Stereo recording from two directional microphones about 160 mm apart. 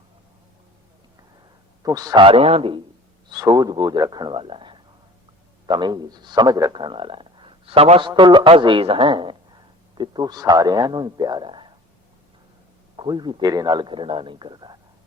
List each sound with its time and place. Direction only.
1.8 s a man's voice: 25° right (ahead or behind)
13.0 s a man's voice: 30° right (ahead or behind)